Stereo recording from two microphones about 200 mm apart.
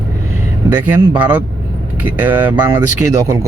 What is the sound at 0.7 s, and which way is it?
Speech, 10° right (ahead or behind).